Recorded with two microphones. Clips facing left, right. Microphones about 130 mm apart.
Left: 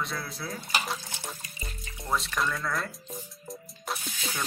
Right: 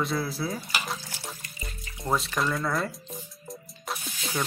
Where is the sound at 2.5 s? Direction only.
20° right (ahead or behind).